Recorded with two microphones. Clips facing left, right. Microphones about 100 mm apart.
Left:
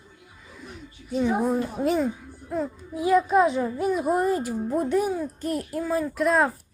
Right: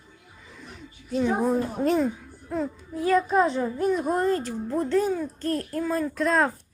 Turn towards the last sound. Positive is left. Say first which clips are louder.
# left 1 dB
turn(degrees=5)  # may be behind; listen again after turning